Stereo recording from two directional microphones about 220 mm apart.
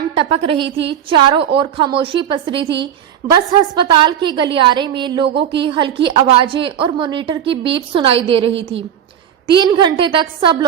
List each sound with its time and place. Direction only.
0.2 s a woman's voice: 25° right (ahead or behind)
2.6 s a woman's voice: 55° right (ahead or behind)
3.2 s a woman's voice: 20° right (ahead or behind)
9.6 s a woman's voice: 20° right (ahead or behind)